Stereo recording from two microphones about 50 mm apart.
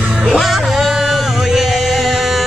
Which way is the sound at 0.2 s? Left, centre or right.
Centre.